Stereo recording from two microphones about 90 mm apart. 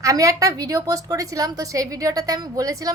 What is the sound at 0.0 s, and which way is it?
A woman's voice, 40° right (ahead or behind).